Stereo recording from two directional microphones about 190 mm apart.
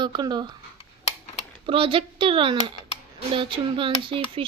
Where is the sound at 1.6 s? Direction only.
30° right (ahead or behind).